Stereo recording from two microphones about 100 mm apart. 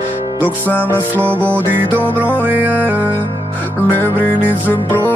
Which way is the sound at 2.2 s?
15° right (ahead or behind).